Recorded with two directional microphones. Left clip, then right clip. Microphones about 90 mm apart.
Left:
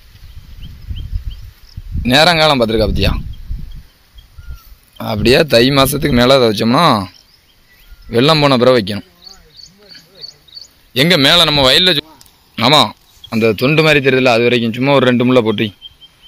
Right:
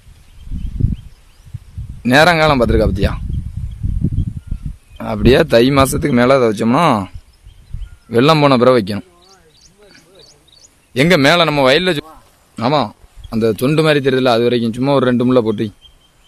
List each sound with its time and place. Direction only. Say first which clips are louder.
2.0 s a man's voice: left 1 dB; 40° right (ahead or behind)
4.9 s a man's voice: left 1 dB; 30° right (ahead or behind)
5.9 s speech: left 2 dB; 20° right (ahead or behind)
8.1 s a man's voice: even; 50° right (ahead or behind)
10.2 s wild animals: left 13 dB; centre (ahead or behind)
10.9 s a man's voice: left 1 dB; 35° right (ahead or behind)
12.5 s a sound: left 5 dB; 10° right (ahead or behind)
13.4 s speech: left 2 dB; 25° right (ahead or behind)
13.7 s a man's voice: left 3 dB; 40° right (ahead or behind)